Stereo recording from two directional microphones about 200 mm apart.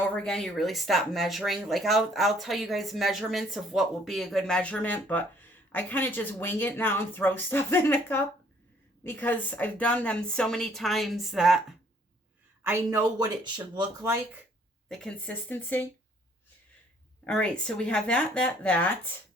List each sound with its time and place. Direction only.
0.0 s speech: 5° left (ahead or behind)
12.6 s speech: 15° right (ahead or behind)
14.8 s speech: centre (ahead or behind)
17.2 s speech: 5° left (ahead or behind)